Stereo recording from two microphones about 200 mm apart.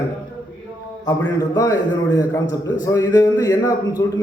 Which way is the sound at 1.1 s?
15° left (ahead or behind).